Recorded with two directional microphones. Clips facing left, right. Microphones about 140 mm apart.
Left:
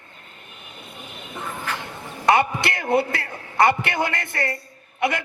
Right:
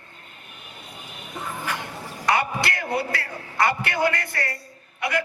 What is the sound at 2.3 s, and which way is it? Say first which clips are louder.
A man's voice: left 4 dB; 25° left (ahead or behind).